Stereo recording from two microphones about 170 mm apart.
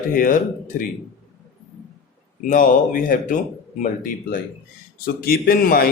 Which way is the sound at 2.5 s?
50° left (ahead or behind).